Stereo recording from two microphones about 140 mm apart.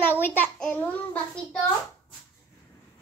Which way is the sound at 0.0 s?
15° left (ahead or behind).